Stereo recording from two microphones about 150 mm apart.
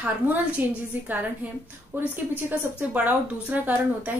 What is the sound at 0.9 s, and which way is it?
Speech, 10° right (ahead or behind).